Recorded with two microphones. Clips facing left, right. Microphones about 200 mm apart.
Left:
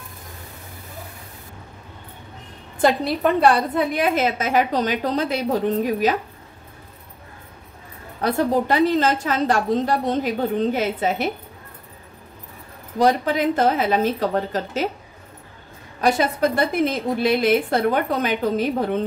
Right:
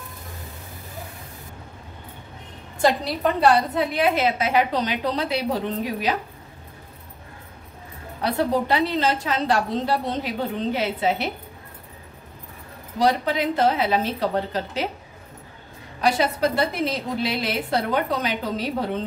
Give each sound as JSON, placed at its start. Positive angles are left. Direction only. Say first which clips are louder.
{"t": 3.3, "sound": "a woman's voice", "louder": "even", "side_deg": 50}
{"t": 8.2, "sound": "a woman's voice", "louder": "left 2 dB", "side_deg": 45}
{"t": 13.0, "sound": "a woman's voice", "louder": "left 3 dB", "side_deg": 50}
{"t": 16.0, "sound": "a woman's voice", "louder": "left 2 dB", "side_deg": 50}